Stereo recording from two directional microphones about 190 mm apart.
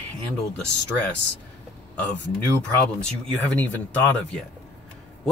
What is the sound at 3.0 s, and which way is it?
Speech, 5° left (ahead or behind).